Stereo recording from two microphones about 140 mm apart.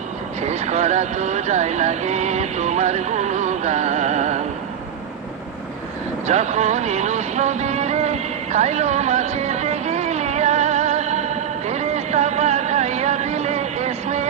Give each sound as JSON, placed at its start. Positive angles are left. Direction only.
{"t": 0.4, "sound": "speech", "side_deg": -55}
{"t": 6.2, "sound": "music", "side_deg": -55}